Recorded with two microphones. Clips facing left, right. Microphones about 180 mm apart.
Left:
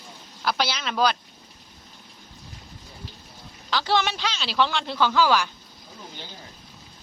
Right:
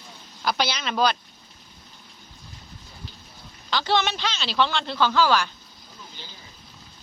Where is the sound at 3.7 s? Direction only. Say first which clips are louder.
Even; 5° left (ahead or behind).